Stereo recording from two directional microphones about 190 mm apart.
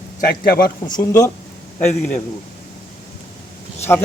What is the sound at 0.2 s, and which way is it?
Speech, 50° left (ahead or behind).